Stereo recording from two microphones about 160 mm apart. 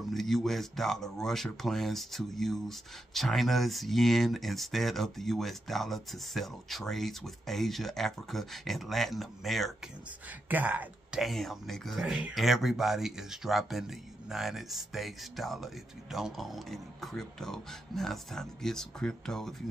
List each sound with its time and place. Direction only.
0.0 s speech: centre (ahead or behind)